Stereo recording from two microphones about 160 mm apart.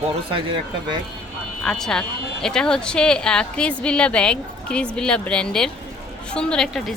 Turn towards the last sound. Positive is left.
turn(degrees=5)  # may be behind; listen again after turning